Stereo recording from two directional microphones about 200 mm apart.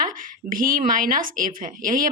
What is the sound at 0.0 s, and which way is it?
A woman's voice, 45° right (ahead or behind).